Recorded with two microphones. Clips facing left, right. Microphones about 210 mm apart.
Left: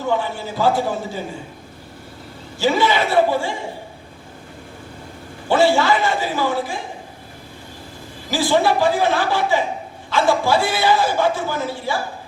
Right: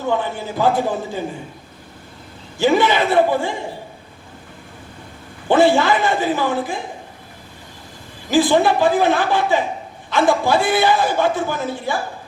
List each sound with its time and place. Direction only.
0.2 s a man's voice: 20° right (ahead or behind)
2.6 s a man's voice: 20° right (ahead or behind)
5.5 s a man's voice: 20° right (ahead or behind)
8.3 s a man's voice: 20° right (ahead or behind)